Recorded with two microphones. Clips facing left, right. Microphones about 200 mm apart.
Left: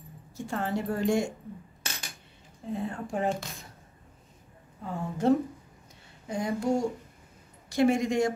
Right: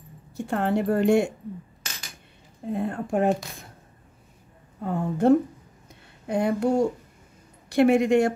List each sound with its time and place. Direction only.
0.5 s a woman's voice: 60° right (ahead or behind)
2.7 s a woman's voice: 55° right (ahead or behind)
4.8 s a woman's voice: 55° right (ahead or behind)